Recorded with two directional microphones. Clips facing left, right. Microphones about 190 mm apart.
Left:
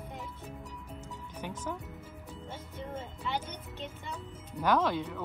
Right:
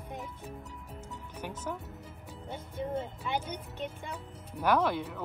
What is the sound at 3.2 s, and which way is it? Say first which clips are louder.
Speech: right 2 dB; 10° right (ahead or behind).